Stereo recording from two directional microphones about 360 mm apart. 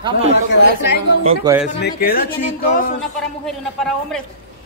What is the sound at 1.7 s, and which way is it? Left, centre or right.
Speech, left.